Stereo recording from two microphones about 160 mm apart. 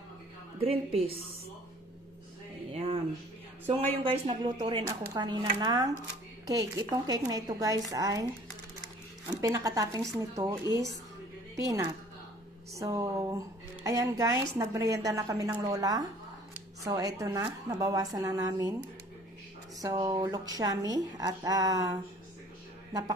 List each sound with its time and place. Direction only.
0.6 s a woman's voice: 35° right (ahead or behind)
2.7 s a sound: 35° right (ahead or behind)
4.0 s a woman's voice: 30° right (ahead or behind)
9.3 s a woman's voice: 25° right (ahead or behind)
19.8 s a woman's voice: 25° right (ahead or behind)